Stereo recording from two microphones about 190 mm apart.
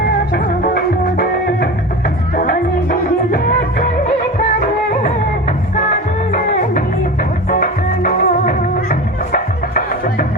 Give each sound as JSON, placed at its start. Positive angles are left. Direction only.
{"t": 0.3, "sound": "music", "side_deg": 55}
{"t": 5.0, "sound": "music", "side_deg": 35}
{"t": 8.0, "sound": "music", "side_deg": 45}